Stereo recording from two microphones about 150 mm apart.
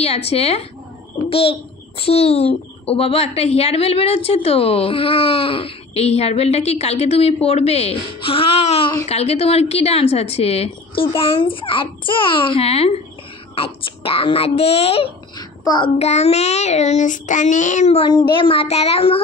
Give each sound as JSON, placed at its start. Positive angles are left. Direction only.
{"t": 0.3, "sound": "a child's voice", "side_deg": 40}
{"t": 15.3, "sound": "a sound", "side_deg": 25}
{"t": 16.0, "sound": "child singing", "side_deg": 45}
{"t": 18.1, "sound": "a child's voice", "side_deg": 35}